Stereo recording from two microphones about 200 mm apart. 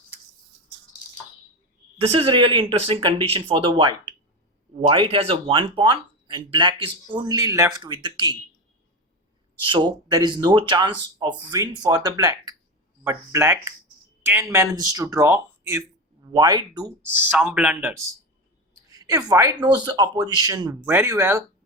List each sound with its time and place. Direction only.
2.0 s speech: 25° right (ahead or behind)
9.6 s speech: 25° right (ahead or behind); by 18.0 s 5° right (ahead or behind)
18.9 s a woman's voice: 15° right (ahead or behind)